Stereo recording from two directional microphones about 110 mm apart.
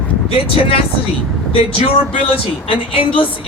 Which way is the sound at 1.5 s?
60° left (ahead or behind).